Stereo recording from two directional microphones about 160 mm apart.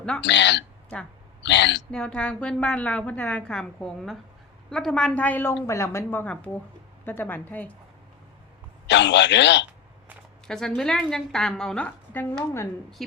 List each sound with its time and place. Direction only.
0.2 s speech: 90° left
1.9 s a woman's voice: 5° left (ahead or behind)
8.9 s speech: 90° left
10.4 s a woman's voice: 5° left (ahead or behind)
13.0 s a woman's voice: centre (ahead or behind)